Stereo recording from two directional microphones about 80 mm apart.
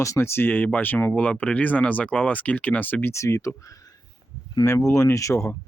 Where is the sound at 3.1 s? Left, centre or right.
Left.